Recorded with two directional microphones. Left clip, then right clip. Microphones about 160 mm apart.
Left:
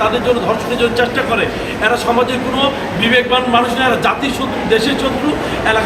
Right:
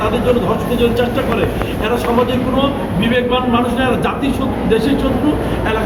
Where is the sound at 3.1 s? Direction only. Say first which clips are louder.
Left 3 dB; 15° left (ahead or behind).